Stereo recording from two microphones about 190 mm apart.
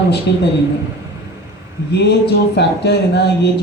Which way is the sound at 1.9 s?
60° left (ahead or behind).